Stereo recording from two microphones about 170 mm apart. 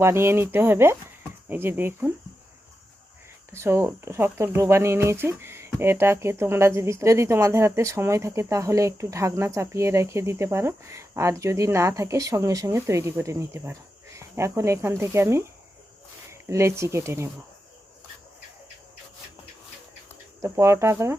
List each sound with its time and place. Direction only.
0.0 s speech: 15° right (ahead or behind)
3.6 s speech: 15° right (ahead or behind)
20.4 s speech: 15° right (ahead or behind)